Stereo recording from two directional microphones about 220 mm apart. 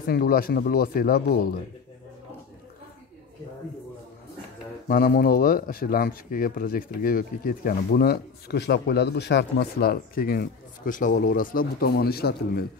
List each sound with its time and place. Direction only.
0.0 s speech: 40° left (ahead or behind)
4.8 s speech: 45° left (ahead or behind)